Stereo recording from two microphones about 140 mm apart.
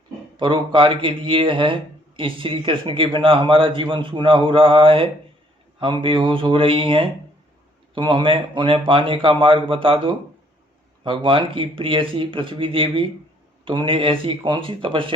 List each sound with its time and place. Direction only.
0.3 s speech: 35° right (ahead or behind)